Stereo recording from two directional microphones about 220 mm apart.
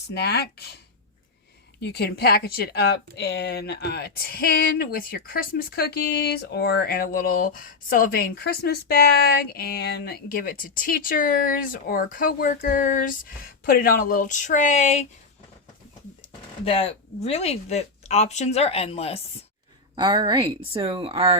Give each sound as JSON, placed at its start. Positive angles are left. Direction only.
{"t": 0.1, "sound": "speech", "side_deg": 45}
{"t": 1.8, "sound": "speech", "side_deg": 45}
{"t": 16.6, "sound": "speech", "side_deg": 25}
{"t": 20.0, "sound": "speech", "side_deg": -20}